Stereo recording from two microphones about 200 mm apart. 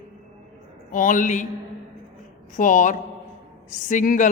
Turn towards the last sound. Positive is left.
turn(degrees=40)  # may be behind; listen again after turning